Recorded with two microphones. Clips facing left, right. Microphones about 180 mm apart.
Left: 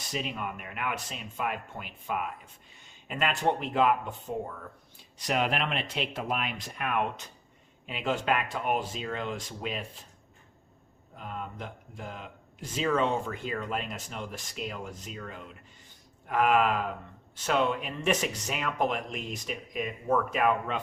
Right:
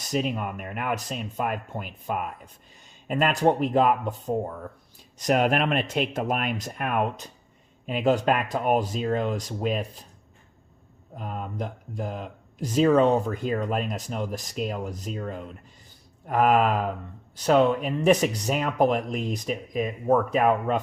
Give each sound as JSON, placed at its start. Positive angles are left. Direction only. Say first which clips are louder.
{"t": 0.1, "sound": "speech", "louder": "right 7 dB", "side_deg": -45}
{"t": 11.2, "sound": "speech", "louder": "right 6 dB", "side_deg": -45}
{"t": 16.2, "sound": "speech", "louder": "right 4 dB", "side_deg": -40}